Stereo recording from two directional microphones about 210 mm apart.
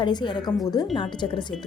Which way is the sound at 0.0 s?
20° left (ahead or behind).